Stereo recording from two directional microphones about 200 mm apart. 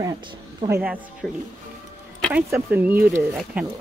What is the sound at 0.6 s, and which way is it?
Speech, 10° right (ahead or behind).